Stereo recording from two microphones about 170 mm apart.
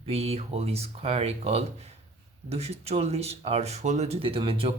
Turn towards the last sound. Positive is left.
turn(degrees=-35)  # may be behind; listen again after turning